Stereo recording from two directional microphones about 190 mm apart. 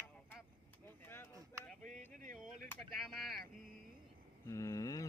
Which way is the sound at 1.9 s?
45° right (ahead or behind).